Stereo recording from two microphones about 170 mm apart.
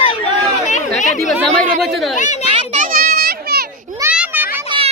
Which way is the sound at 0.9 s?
45° left (ahead or behind).